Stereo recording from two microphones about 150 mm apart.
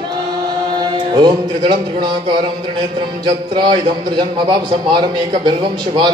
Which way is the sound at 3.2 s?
30° right (ahead or behind).